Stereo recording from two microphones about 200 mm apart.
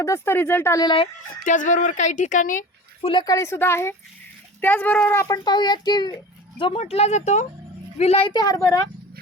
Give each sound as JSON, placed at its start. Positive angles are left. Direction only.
{"t": 0.0, "sound": "speech", "side_deg": 10}
{"t": 1.5, "sound": "speech", "side_deg": 40}
{"t": 3.0, "sound": "a child's voice", "side_deg": 25}